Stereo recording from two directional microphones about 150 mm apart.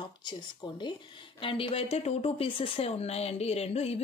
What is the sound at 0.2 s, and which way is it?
Speech, 30° left (ahead or behind).